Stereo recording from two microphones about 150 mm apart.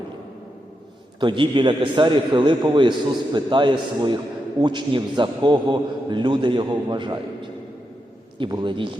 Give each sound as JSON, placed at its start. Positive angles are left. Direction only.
{"t": 1.2, "sound": "a man's voice", "side_deg": -35}
{"t": 8.4, "sound": "a man's voice", "side_deg": -30}